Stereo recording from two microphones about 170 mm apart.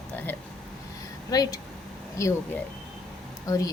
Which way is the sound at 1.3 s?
20° left (ahead or behind).